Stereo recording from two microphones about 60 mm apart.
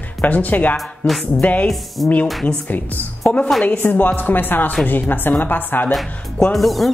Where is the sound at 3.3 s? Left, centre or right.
Left.